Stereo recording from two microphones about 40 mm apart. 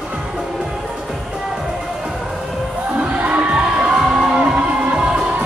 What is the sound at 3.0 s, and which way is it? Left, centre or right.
Crowd, right.